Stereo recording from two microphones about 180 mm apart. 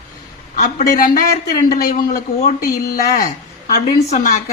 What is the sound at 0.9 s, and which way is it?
Speech, 55° left (ahead or behind).